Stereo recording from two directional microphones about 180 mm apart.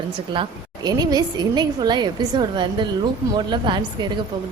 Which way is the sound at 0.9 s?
20° right (ahead or behind).